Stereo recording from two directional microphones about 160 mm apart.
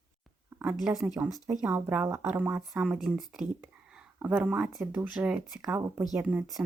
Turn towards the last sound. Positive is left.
turn(degrees=-10)  # may be behind; listen again after turning